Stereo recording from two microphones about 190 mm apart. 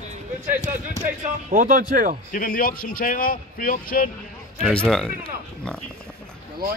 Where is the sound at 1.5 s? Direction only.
45° right (ahead or behind).